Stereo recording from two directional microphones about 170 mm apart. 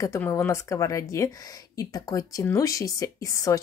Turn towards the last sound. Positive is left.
turn(degrees=20)  # may be behind; listen again after turning